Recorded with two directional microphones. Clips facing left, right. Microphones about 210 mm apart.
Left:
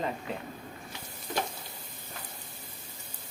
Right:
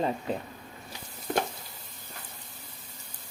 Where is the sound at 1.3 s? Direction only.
55° right (ahead or behind).